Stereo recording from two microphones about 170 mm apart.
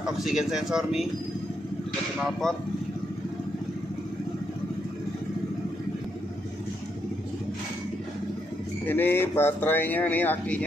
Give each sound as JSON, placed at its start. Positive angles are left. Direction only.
{"t": 0.0, "sound": "speech", "side_deg": 0}
{"t": 2.4, "sound": "speech", "side_deg": 0}
{"t": 8.8, "sound": "speech", "side_deg": 10}